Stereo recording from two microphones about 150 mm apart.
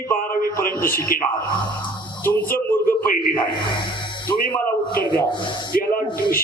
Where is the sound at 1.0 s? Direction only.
70° left (ahead or behind).